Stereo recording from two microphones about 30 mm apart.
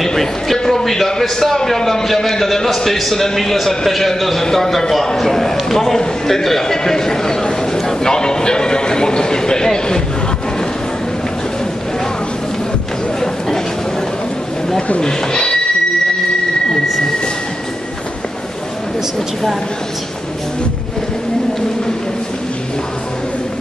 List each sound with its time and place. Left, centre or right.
0.0 s a sound: centre
0.8 s a man's voice: centre
15.0 s a man's voice: left